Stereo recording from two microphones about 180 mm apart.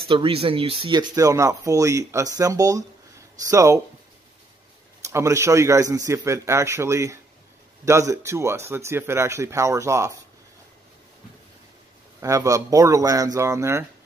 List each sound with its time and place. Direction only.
0.1 s speech: 30° right (ahead or behind)
5.0 s speech: 15° right (ahead or behind)
12.2 s speech: 15° right (ahead or behind)